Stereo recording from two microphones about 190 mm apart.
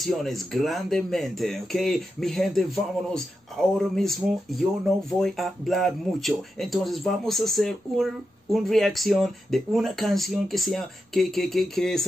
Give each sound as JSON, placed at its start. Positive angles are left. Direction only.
{"t": 0.0, "sound": "speech", "side_deg": 0}